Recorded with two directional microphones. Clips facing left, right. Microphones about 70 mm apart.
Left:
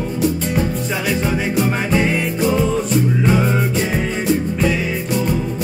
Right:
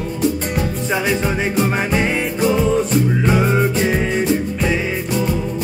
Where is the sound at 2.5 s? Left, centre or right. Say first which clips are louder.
Right 1 dB; centre.